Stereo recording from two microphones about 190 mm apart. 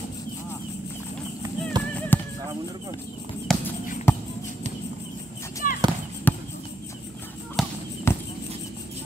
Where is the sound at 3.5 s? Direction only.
Centre (ahead or behind).